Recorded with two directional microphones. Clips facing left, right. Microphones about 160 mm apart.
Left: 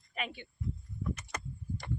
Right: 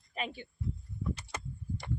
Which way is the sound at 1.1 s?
25° right (ahead or behind).